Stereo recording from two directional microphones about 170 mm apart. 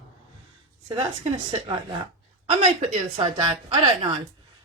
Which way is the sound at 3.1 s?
30° right (ahead or behind).